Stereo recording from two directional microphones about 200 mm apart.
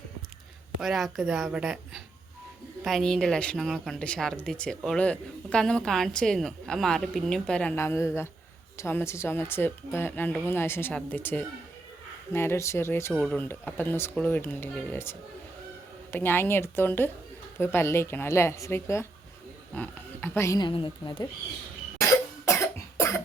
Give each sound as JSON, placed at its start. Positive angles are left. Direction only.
{"t": 0.8, "sound": "a woman's voice", "side_deg": 0}
{"t": 16.1, "sound": "a woman's voice", "side_deg": 10}
{"t": 22.0, "sound": "cough", "side_deg": 15}